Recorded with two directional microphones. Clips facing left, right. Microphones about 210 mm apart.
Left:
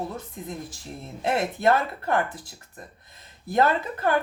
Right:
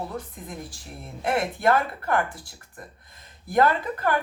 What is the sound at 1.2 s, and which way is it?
Speech, 25° left (ahead or behind).